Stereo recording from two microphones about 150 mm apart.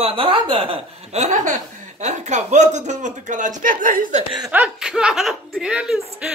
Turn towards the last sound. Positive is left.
turn(degrees=-5)  # may be behind; listen again after turning